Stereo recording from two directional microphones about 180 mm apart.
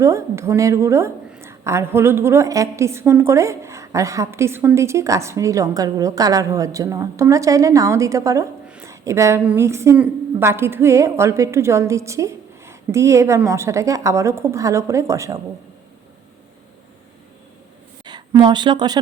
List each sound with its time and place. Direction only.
0.0 s a woman's voice: 15° right (ahead or behind)
8.6 s a sound: 5° right (ahead or behind)
8.9 s a woman's voice: 15° right (ahead or behind)
18.0 s speech: 25° right (ahead or behind)